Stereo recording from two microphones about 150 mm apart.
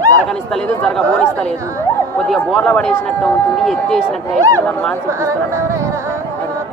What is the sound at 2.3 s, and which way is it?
Speech, centre (ahead or behind).